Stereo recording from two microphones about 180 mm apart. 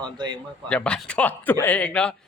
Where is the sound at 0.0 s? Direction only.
25° right (ahead or behind).